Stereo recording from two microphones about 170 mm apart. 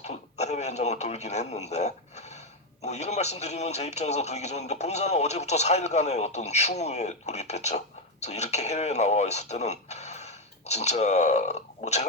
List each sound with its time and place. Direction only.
0.0 s speech: 40° left (ahead or behind)